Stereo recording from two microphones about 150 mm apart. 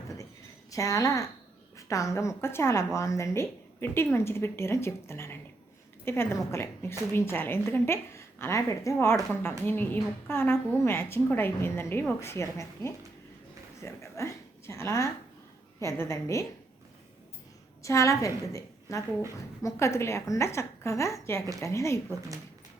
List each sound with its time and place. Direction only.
0.7 s a woman's voice: 20° left (ahead or behind)
17.8 s a woman's voice: 20° left (ahead or behind)